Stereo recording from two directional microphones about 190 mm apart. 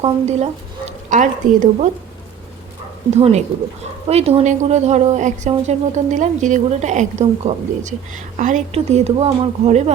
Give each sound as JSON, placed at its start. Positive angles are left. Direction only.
{"t": 0.0, "sound": "speech", "side_deg": -35}
{"t": 3.2, "sound": "speech", "side_deg": -35}